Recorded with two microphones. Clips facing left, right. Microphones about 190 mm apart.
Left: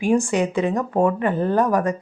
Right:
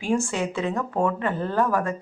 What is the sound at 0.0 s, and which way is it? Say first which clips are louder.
A woman's voice: left 5 dB; 15° left (ahead or behind).